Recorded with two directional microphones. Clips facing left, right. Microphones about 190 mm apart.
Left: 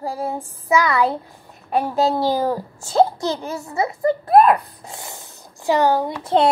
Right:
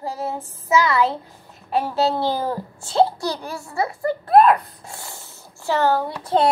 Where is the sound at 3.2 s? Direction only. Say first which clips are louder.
Left 3 dB; 20° left (ahead or behind).